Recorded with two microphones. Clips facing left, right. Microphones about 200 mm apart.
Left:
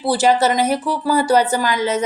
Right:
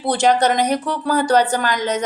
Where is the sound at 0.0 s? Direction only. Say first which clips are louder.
Left 1 dB; 5° left (ahead or behind).